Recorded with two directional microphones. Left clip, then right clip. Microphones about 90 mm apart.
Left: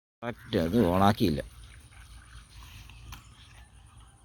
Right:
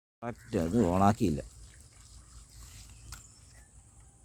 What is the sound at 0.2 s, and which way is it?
Speech, centre (ahead or behind).